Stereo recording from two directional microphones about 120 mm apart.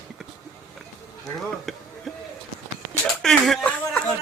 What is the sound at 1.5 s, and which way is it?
Speech, centre (ahead or behind).